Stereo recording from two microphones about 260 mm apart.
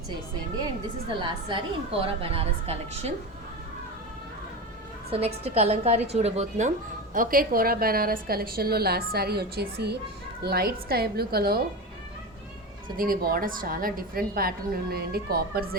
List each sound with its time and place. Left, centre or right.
1.2 s a woman's voice: centre
5.1 s a woman's voice: right
13.0 s a woman's voice: right